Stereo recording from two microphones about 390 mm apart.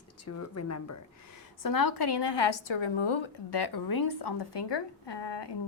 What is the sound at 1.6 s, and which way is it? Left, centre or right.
A woman's voice, left.